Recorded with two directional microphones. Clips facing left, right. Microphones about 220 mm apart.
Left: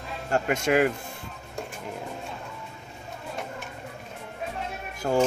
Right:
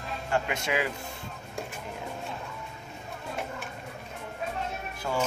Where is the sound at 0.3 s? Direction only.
45° left (ahead or behind).